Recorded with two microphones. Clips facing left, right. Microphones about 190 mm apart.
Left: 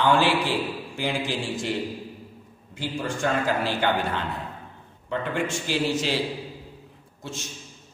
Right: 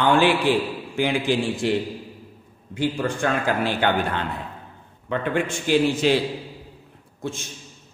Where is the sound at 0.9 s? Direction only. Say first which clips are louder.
Right 7 dB; 60° right (ahead or behind).